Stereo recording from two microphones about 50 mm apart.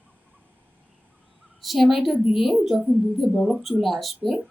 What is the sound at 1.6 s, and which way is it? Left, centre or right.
A woman's voice, centre.